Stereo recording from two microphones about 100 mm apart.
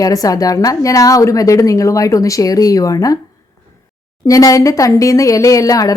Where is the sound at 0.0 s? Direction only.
35° left (ahead or behind).